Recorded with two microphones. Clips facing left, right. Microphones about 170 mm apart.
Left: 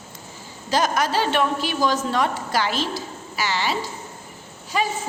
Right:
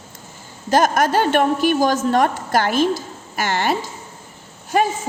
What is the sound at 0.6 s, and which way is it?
A woman's voice, 50° right (ahead or behind).